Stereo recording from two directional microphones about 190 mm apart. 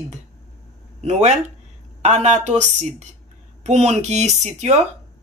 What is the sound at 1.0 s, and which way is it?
A woman's voice, 35° right (ahead or behind).